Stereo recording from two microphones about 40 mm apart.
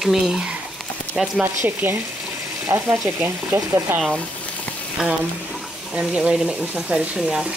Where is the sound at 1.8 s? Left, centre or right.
Right.